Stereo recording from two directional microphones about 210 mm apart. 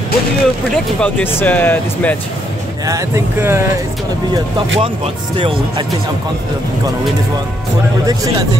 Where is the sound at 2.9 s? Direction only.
15° right (ahead or behind).